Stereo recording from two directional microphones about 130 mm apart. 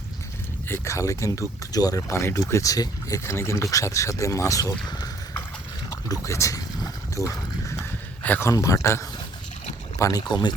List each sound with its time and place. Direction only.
0.7 s speech: 20° left (ahead or behind)
6.1 s a sound: 25° left (ahead or behind)
7.8 s speech: 15° left (ahead or behind); by 10.5 s 35° left (ahead or behind)